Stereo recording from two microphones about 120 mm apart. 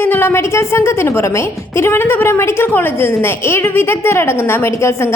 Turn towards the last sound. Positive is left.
turn(degrees=20)  # may be behind; listen again after turning